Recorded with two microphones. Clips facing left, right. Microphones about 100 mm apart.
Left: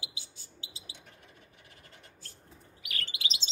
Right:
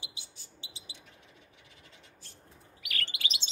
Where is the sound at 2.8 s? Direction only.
25° left (ahead or behind).